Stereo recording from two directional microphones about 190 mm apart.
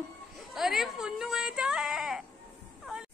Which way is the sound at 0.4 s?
Centre (ahead or behind).